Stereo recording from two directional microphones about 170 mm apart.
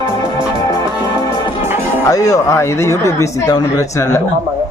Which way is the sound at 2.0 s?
20° left (ahead or behind).